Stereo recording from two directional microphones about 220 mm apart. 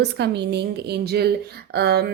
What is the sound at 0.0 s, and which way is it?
A woman's voice, 50° right (ahead or behind).